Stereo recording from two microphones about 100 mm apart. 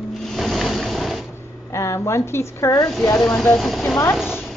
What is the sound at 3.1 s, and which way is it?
Speech, 5° left (ahead or behind).